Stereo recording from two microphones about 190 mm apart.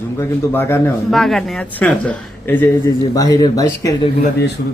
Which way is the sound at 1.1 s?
Centre (ahead or behind).